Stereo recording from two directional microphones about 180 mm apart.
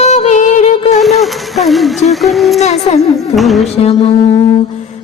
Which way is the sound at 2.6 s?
35° left (ahead or behind).